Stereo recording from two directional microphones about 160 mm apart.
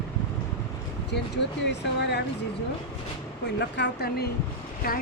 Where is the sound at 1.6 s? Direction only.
90° left.